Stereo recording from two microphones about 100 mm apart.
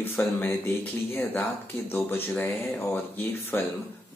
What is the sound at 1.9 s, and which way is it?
Speech, 20° left (ahead or behind).